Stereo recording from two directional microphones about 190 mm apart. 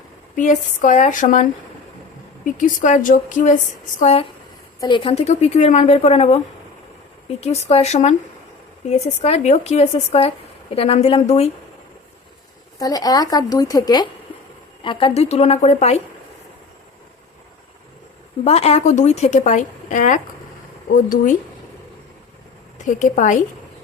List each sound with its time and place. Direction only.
0.3 s a woman's voice: 40° left (ahead or behind)
12.8 s a woman's voice: 20° left (ahead or behind); by 16.0 s 35° left (ahead or behind)
18.4 s a woman's voice: 35° left (ahead or behind)
22.9 s a woman's voice: 40° left (ahead or behind)